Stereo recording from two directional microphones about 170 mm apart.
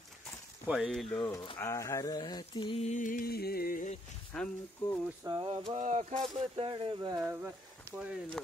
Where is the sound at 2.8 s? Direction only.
50° left (ahead or behind).